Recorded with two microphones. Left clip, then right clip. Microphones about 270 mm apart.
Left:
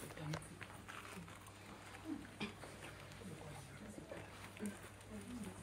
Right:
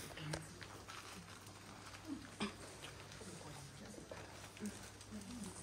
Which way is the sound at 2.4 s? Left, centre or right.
Right.